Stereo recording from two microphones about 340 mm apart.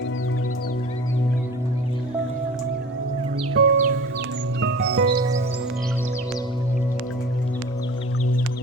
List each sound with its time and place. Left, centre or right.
3.5 s music: right